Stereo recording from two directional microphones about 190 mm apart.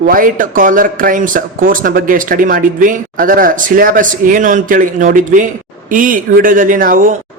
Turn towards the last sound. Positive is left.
turn(degrees=-45)  # may be behind; listen again after turning